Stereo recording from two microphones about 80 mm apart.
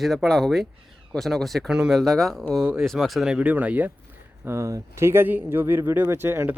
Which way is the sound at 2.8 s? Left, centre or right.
Centre.